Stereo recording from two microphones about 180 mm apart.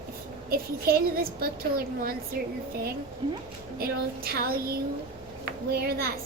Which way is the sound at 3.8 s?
55° right (ahead or behind).